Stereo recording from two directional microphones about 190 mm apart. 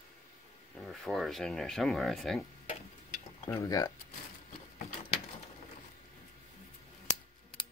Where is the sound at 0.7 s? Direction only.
Centre (ahead or behind).